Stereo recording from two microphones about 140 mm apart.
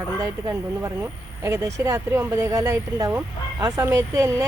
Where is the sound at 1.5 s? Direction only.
20° right (ahead or behind).